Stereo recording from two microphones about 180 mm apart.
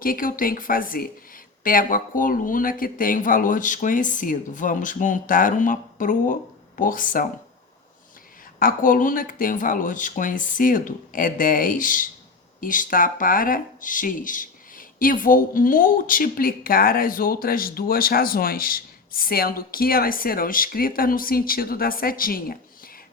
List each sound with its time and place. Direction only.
0.0 s speech: 50° left (ahead or behind)
8.5 s speech: 50° left (ahead or behind)